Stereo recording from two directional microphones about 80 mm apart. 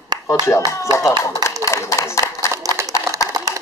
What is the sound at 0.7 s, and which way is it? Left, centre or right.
A man's voice, left.